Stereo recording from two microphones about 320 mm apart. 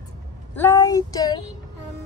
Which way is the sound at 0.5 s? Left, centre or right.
Centre.